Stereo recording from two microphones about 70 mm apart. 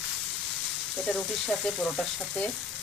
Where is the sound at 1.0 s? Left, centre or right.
Centre.